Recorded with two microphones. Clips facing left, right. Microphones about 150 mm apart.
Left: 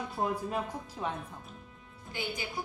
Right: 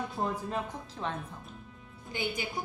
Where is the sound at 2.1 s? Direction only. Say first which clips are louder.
Right 3 dB; 20° right (ahead or behind).